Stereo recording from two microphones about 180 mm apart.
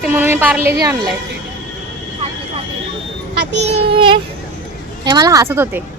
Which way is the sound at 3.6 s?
30° right (ahead or behind).